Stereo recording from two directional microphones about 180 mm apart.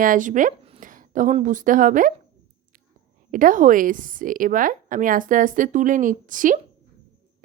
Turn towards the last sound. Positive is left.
turn(degrees=-45)  # may be behind; listen again after turning